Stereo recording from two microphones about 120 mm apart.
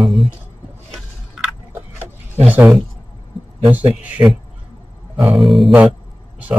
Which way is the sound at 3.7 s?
15° right (ahead or behind).